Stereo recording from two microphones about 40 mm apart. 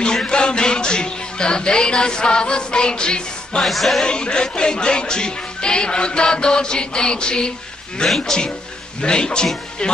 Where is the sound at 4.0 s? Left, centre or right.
Left.